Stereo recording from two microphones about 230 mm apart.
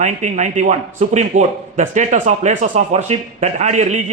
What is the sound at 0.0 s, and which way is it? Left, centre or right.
A man's voice, right.